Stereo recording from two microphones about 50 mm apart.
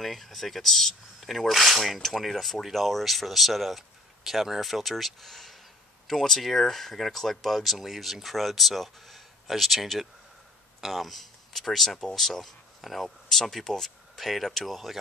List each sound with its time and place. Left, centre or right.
0.0 s speech: centre